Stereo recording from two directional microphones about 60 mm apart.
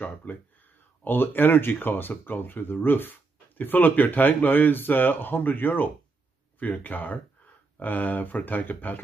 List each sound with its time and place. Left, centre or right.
0.0 s speech: left